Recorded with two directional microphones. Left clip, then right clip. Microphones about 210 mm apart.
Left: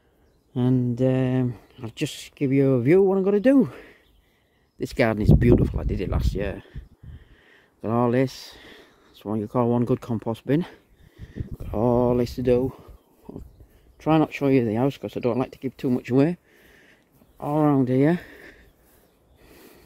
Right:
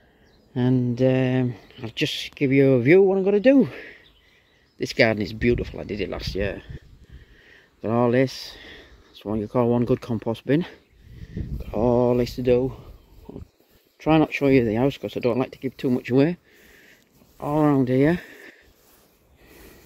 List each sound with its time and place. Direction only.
0.6 s speech: 5° left (ahead or behind)
3.1 s speech: 20° left (ahead or behind)
3.6 s speech: centre (ahead or behind); by 13.4 s 20° left (ahead or behind)
13.9 s speech: 5° left (ahead or behind)
17.4 s speech: 10° left (ahead or behind)